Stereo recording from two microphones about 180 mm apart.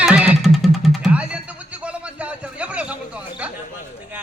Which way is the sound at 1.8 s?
5° right (ahead or behind).